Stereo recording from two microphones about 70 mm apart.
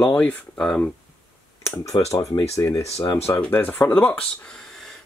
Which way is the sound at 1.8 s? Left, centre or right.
Left.